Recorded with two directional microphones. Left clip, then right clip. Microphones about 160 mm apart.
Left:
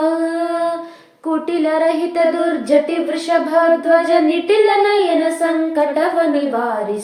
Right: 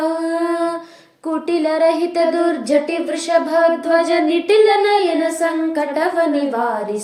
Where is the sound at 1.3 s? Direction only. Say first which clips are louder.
Left 1 dB; 35° right (ahead or behind).